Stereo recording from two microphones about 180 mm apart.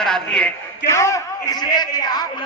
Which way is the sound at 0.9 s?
15° left (ahead or behind).